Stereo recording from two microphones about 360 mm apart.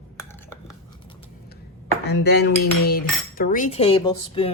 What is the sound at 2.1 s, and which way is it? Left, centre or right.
Cutlery, left.